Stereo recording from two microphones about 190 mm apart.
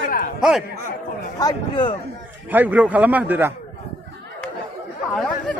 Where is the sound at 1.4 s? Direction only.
20° left (ahead or behind).